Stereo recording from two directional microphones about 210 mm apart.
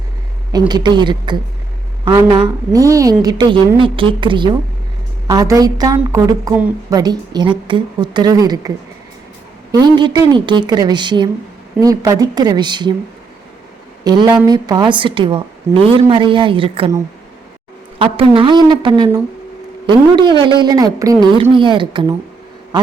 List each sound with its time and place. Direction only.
0.7 s a woman's voice: 20° right (ahead or behind)
9.7 s a woman's voice: 20° right (ahead or behind)
14.0 s a woman's voice: 20° right (ahead or behind)
18.0 s a woman's voice: 25° right (ahead or behind)
20.4 s a woman's voice: 20° right (ahead or behind)